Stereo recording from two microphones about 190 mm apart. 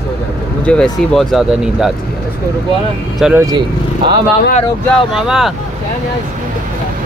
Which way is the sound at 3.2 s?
10° right (ahead or behind).